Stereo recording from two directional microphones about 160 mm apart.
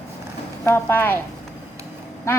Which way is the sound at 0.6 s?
15° left (ahead or behind).